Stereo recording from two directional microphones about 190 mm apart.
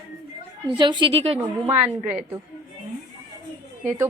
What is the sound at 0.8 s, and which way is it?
Speech, 25° right (ahead or behind).